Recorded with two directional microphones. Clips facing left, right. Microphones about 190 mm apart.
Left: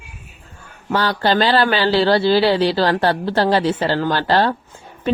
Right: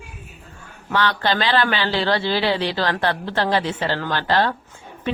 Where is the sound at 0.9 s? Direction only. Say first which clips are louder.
Left 3 dB; 40° left (ahead or behind).